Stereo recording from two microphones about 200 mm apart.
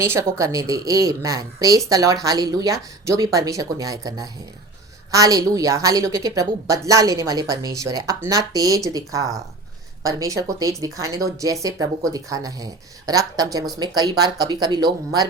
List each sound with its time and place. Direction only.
0.0 s a woman's voice: 15° right (ahead or behind)